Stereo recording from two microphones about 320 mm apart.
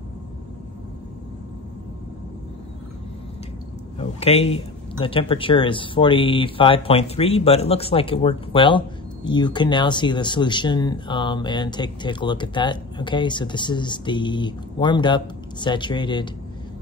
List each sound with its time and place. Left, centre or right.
4.0 s a man's voice: centre